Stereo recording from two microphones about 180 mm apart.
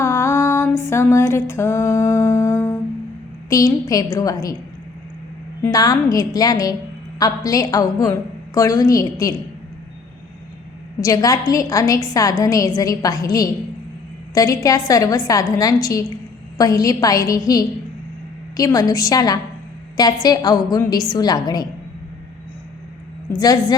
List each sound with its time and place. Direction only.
0.0 s music: 15° left (ahead or behind)
3.5 s a woman's voice: 20° left (ahead or behind)
5.7 s a woman's voice: 20° left (ahead or behind)
11.0 s a woman's voice: 20° left (ahead or behind)
23.4 s a woman's voice: 20° left (ahead or behind)